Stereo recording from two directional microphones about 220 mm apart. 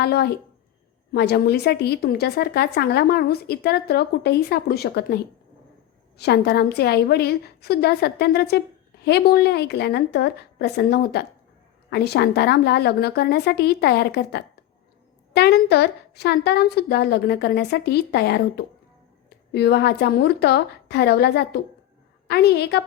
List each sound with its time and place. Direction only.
0.0 s a woman's voice: 45° left (ahead or behind)